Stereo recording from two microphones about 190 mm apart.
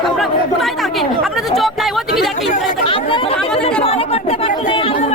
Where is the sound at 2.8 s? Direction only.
30° left (ahead or behind).